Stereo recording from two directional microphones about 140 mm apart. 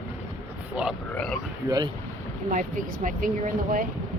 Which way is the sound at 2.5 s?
65° right (ahead or behind).